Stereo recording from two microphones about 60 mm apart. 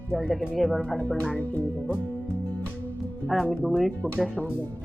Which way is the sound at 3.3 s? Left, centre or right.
Centre.